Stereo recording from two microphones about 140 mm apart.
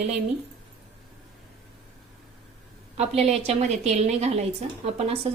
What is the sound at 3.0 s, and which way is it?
A woman's voice, 50° right (ahead or behind).